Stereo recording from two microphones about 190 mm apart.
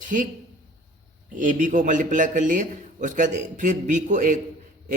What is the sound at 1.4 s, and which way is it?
A man's voice, 40° right (ahead or behind).